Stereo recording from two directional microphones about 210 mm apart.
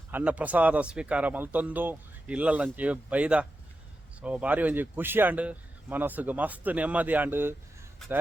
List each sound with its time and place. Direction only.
0.1 s a man's voice: 5° right (ahead or behind)